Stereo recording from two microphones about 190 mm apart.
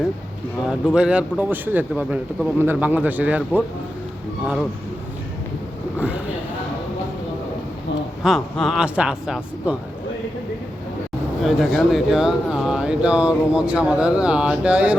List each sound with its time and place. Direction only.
0.7 s speech: 5° right (ahead or behind)
8.2 s speech: centre (ahead or behind)
11.4 s speech: centre (ahead or behind)